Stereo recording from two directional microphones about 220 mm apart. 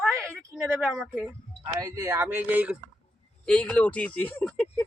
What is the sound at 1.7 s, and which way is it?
Speech, 15° right (ahead or behind).